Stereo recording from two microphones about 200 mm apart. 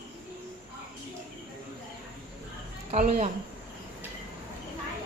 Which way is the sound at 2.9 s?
40° right (ahead or behind).